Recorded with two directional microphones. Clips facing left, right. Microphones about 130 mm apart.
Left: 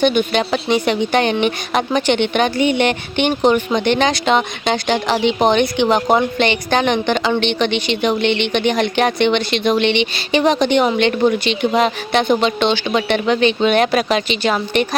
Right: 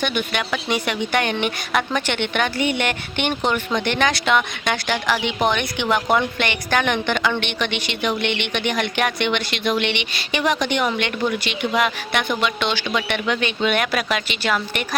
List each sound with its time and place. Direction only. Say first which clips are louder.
0.0 s speech: left 8 dB; 25° left (ahead or behind)